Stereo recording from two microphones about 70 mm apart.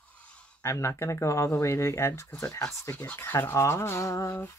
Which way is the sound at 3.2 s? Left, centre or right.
Left.